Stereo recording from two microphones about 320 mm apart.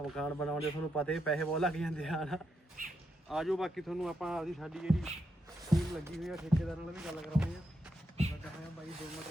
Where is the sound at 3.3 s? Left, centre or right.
Centre.